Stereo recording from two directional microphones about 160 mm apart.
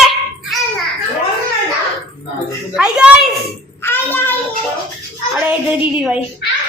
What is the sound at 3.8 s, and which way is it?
Child singing, 15° left (ahead or behind).